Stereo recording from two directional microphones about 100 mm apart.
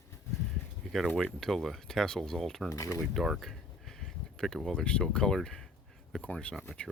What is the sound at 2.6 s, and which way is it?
Speech, 30° left (ahead or behind).